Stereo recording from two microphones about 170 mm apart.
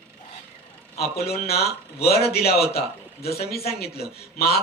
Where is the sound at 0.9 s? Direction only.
65° left (ahead or behind).